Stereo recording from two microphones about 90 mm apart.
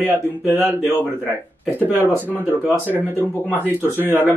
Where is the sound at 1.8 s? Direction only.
20° right (ahead or behind).